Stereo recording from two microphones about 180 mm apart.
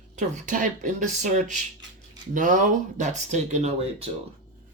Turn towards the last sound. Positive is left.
turn(degrees=-40)  # may be behind; listen again after turning